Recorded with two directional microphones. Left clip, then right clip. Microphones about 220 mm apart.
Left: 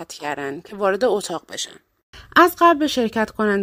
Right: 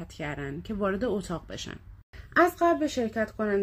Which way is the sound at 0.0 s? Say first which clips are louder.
Left 9 dB; 40° left (ahead or behind).